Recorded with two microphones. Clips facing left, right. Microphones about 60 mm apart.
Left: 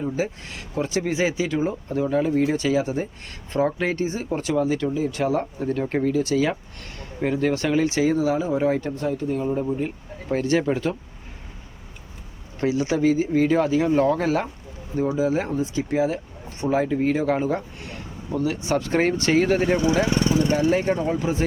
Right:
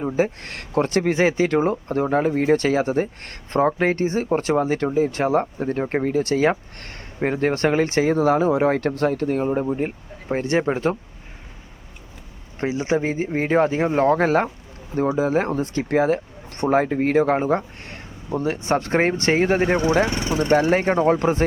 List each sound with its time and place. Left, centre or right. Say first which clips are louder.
0.4 s speech: right 5 dB; right
10.2 s speech: even; right
12.5 s speech: even; right